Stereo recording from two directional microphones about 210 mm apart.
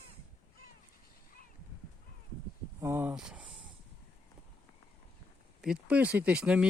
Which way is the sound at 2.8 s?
10° right (ahead or behind).